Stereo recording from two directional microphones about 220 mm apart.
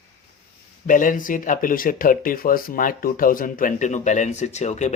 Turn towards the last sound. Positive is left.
turn(degrees=30)  # may be behind; listen again after turning